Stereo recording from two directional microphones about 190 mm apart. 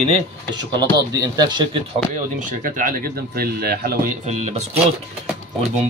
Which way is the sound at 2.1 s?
45° right (ahead or behind).